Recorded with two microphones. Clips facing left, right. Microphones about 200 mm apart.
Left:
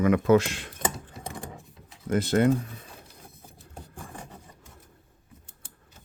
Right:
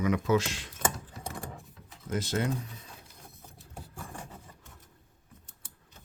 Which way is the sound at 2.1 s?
60° left (ahead or behind).